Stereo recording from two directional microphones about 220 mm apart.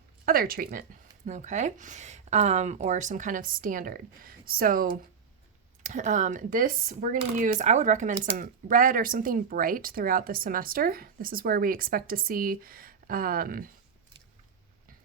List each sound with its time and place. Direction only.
0.3 s speech: 40° right (ahead or behind)